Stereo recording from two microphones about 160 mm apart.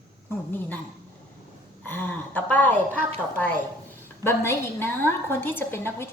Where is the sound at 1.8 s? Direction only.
15° left (ahead or behind).